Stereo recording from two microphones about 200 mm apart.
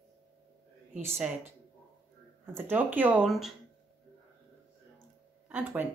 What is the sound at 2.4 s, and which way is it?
A woman's voice, 10° right (ahead or behind).